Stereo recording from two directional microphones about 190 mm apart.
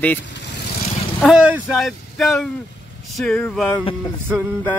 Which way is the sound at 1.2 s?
5° right (ahead or behind).